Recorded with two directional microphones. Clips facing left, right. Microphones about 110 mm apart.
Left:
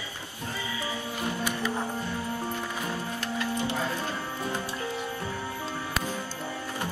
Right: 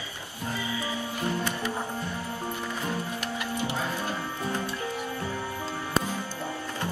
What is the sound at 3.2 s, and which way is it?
Music, 15° right (ahead or behind).